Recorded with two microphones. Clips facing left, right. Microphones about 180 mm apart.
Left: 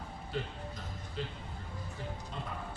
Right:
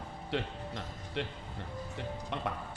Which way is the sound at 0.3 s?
80° right.